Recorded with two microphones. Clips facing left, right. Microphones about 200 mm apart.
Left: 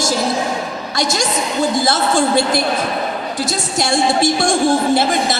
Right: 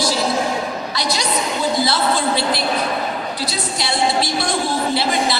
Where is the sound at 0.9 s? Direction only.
45° left (ahead or behind).